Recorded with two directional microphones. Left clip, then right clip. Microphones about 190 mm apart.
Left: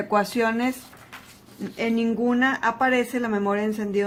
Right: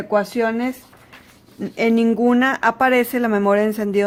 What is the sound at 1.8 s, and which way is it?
Speech, 45° right (ahead or behind).